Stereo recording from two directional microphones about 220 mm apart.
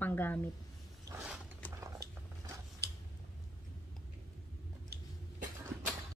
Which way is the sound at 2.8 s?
50° right (ahead or behind).